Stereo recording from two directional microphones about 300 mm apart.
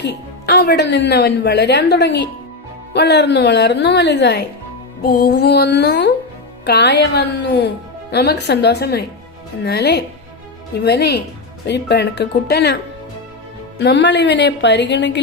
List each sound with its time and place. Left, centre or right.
0.0 s a woman's voice: left